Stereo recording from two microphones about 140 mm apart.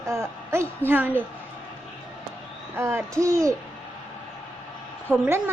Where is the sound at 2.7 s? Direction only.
20° right (ahead or behind).